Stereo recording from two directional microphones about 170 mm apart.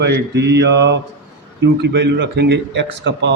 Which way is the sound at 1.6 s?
80° right.